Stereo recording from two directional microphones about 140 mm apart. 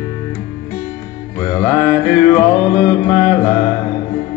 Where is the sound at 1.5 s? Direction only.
10° left (ahead or behind).